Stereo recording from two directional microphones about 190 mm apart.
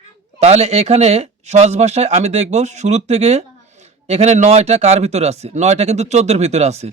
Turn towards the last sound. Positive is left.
turn(degrees=-35)  # may be behind; listen again after turning